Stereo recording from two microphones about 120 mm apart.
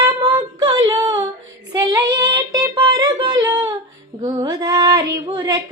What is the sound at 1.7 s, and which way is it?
Child singing, 25° right (ahead or behind).